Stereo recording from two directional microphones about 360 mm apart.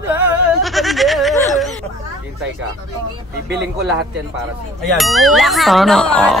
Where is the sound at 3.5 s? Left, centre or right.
Right.